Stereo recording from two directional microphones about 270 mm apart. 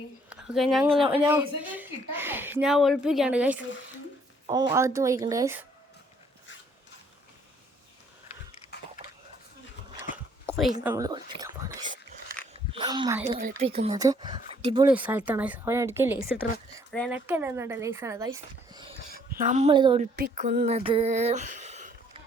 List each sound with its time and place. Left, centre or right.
0.3 s a woman's voice: centre
10.4 s a woman's voice: centre
10.9 s speech: centre
13.2 s a sound: right
14.0 s speech: centre
14.8 s speech: centre
16.9 s speech: centre
17.2 s speech: centre
19.1 s a woman's voice: right
20.1 s a sound: right